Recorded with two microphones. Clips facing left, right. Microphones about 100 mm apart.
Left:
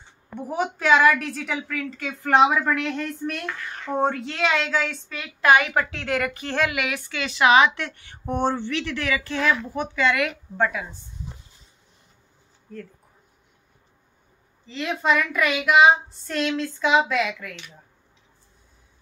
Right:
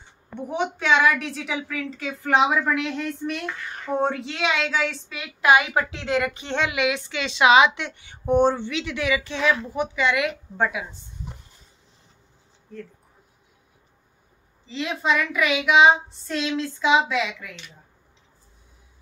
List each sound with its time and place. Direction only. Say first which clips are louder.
0.3 s speech: even; centre (ahead or behind)
5.1 s a woman's voice: left 1 dB; 10° right (ahead or behind)
14.7 s speech: left 1 dB; centre (ahead or behind)